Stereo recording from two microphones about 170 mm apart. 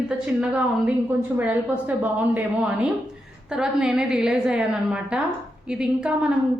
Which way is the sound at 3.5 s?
5° right (ahead or behind).